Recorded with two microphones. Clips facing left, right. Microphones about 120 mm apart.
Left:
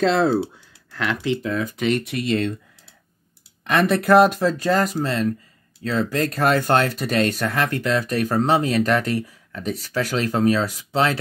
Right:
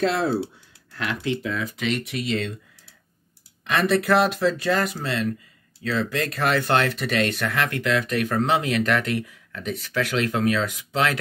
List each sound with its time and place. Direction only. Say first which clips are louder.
0.0 s speech: left 4 dB; 90° left
1.4 s speech: left 4 dB; 45° left (ahead or behind)
3.6 s speech: left 2 dB; 50° left (ahead or behind); by 11.1 s 30° left (ahead or behind)